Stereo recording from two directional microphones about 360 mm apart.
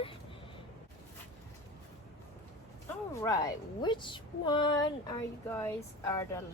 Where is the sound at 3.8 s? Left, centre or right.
Centre.